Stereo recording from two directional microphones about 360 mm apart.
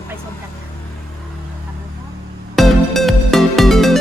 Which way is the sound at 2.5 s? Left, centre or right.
Centre.